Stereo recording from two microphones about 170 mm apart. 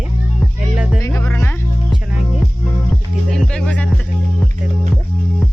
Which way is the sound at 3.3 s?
5° left (ahead or behind).